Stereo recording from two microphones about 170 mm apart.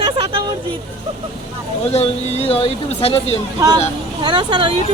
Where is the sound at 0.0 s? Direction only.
30° right (ahead or behind).